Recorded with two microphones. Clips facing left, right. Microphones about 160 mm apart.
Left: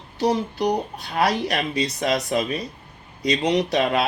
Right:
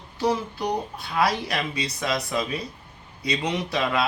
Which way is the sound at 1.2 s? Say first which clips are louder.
Left 3 dB; 60° left (ahead or behind).